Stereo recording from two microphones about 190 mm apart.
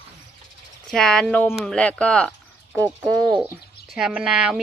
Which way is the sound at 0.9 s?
Centre (ahead or behind).